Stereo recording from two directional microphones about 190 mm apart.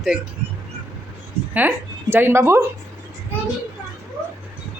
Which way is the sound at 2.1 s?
10° right (ahead or behind).